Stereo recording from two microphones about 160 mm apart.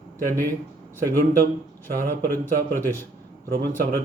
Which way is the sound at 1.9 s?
60° right (ahead or behind).